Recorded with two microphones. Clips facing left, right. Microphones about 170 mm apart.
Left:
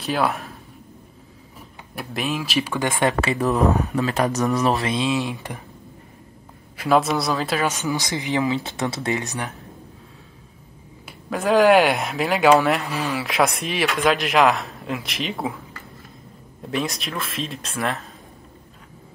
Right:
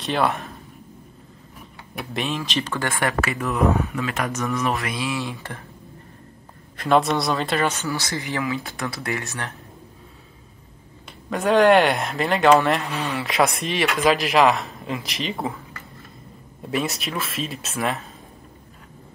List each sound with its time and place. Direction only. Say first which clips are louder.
0.0 s speech: even; centre (ahead or behind)
2.0 s speech: left 1 dB; 5° left (ahead or behind); by 4.9 s 35° left (ahead or behind)
4.9 s speech: left 4 dB; 20° left (ahead or behind)
6.8 s speech: even; 5° left (ahead or behind)
7.7 s speech: left 2 dB; 15° left (ahead or behind)
11.1 s speech: even; centre (ahead or behind)
16.6 s speech: even; 5° right (ahead or behind)